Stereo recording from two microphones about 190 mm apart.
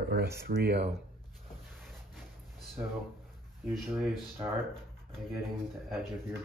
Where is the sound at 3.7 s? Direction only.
Centre (ahead or behind).